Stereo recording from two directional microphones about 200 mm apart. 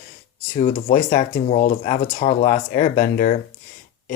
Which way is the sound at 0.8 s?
45° left (ahead or behind).